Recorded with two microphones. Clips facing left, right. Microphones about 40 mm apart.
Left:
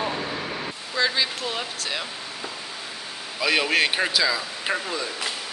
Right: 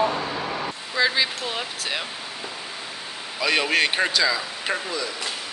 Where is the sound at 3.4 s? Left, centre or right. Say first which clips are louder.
Even; centre.